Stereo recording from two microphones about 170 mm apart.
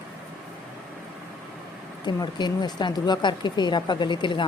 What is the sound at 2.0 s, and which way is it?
Speech, 25° left (ahead or behind).